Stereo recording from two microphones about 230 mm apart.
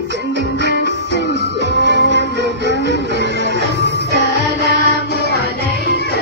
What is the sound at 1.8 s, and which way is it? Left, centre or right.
Music, right.